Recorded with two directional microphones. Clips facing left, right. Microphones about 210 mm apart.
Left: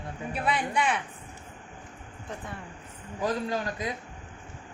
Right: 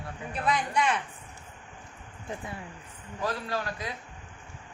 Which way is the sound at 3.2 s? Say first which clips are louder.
Left 3 dB; 20° left (ahead or behind).